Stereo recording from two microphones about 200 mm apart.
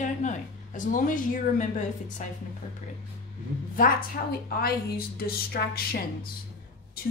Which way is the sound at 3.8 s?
45° left (ahead or behind).